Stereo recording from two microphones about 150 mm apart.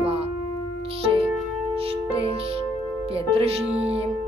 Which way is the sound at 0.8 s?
40° right (ahead or behind).